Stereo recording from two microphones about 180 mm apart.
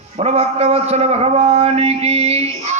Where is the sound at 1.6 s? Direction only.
35° right (ahead or behind).